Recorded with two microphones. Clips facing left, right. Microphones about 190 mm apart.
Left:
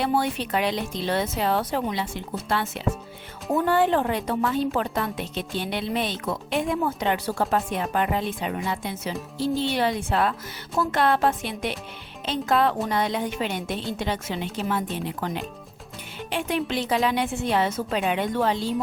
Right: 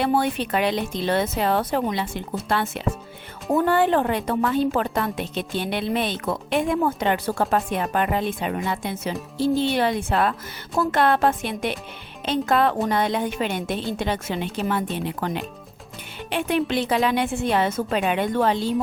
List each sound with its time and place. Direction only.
0.0 s a woman's voice: 55° right (ahead or behind)
16.3 s a woman's voice: 60° right (ahead or behind)